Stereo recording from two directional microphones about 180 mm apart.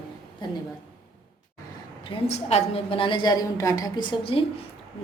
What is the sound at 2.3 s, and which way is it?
A woman's voice, 35° left (ahead or behind).